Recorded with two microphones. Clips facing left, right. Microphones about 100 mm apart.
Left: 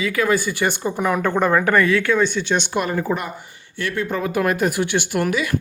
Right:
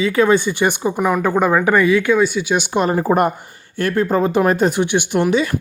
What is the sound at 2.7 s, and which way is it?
Speech, 30° right (ahead or behind).